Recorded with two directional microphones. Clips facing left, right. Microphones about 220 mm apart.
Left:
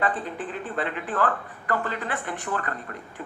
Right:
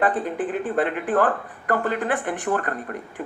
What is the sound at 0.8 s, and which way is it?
Speech, 55° right (ahead or behind).